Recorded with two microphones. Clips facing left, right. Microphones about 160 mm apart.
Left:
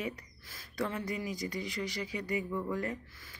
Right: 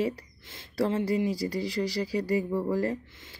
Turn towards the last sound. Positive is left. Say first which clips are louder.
# right 8 dB
turn(degrees=-35)  # may be behind; listen again after turning